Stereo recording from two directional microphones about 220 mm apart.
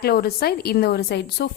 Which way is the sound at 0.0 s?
45° left (ahead or behind).